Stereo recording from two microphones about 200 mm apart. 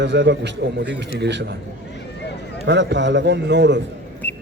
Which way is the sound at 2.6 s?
60° right (ahead or behind).